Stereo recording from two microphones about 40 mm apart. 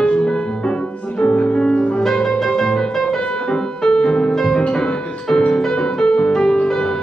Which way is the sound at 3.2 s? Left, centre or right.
Left.